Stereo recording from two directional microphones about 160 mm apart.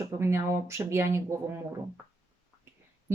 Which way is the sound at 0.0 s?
15° right (ahead or behind).